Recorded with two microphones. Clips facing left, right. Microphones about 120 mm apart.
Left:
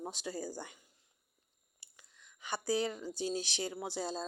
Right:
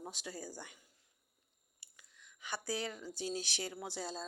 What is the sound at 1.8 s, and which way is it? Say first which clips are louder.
Speech: left 1 dB; 30° left (ahead or behind).